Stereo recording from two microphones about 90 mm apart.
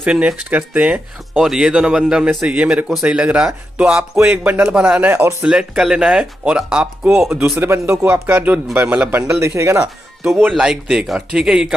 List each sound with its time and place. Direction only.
0.0 s speech: 10° right (ahead or behind)
5.4 s speech: 10° right (ahead or behind)
7.5 s speech: 25° right (ahead or behind)
9.3 s speech: 30° right (ahead or behind)
10.6 s speech: 10° right (ahead or behind)